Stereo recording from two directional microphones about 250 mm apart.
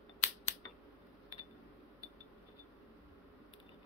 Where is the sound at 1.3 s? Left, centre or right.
Centre.